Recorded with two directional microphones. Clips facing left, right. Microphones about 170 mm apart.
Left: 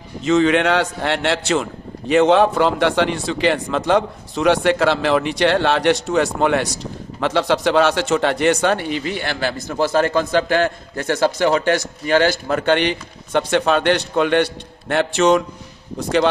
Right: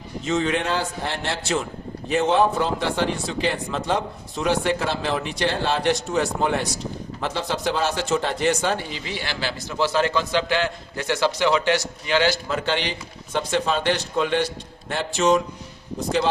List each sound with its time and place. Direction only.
0.3 s a man's voice: 85° left